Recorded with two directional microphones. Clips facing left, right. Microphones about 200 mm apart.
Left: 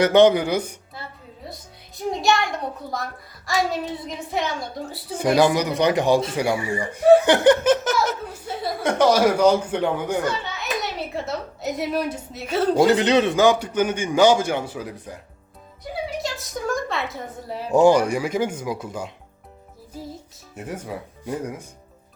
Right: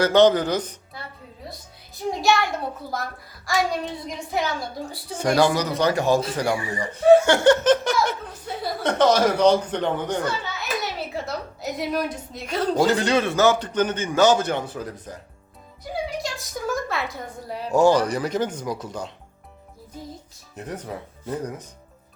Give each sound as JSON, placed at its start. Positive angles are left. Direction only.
{"t": 0.0, "sound": "speech", "side_deg": 15}
{"t": 2.2, "sound": "a child's voice", "side_deg": 0}
{"t": 5.3, "sound": "a man's voice", "side_deg": 15}
{"t": 10.8, "sound": "a sound", "side_deg": 0}
{"t": 12.9, "sound": "a man's voice", "side_deg": 20}
{"t": 16.0, "sound": "dog", "side_deg": 0}
{"t": 17.7, "sound": "a man's voice", "side_deg": 15}
{"t": 20.6, "sound": "a man's voice", "side_deg": 10}